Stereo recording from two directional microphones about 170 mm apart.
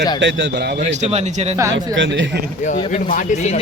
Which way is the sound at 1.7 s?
90° right.